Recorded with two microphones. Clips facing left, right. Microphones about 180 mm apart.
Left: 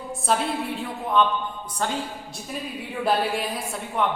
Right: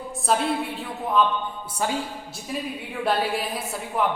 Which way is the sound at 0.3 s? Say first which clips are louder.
Right 1 dB; centre (ahead or behind).